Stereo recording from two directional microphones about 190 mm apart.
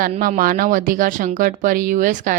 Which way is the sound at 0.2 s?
45° right (ahead or behind).